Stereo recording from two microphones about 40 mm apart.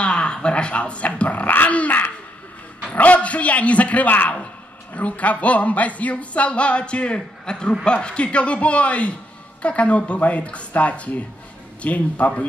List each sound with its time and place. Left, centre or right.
0.0 s speech: left
1.7 s dog: left
2.9 s speech: left